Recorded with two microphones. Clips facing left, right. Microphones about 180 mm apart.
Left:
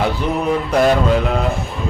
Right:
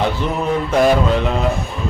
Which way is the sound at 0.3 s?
Centre (ahead or behind).